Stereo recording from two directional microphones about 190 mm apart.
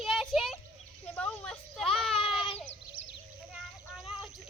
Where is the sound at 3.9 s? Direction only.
Centre (ahead or behind).